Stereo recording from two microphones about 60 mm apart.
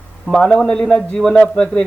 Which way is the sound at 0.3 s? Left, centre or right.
Centre.